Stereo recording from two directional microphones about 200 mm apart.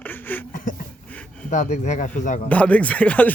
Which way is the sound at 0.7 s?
40° left (ahead or behind).